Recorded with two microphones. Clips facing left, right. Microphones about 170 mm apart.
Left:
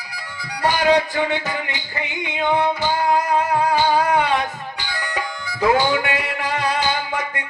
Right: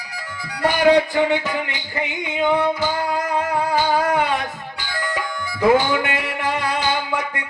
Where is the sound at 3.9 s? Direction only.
50° right (ahead or behind).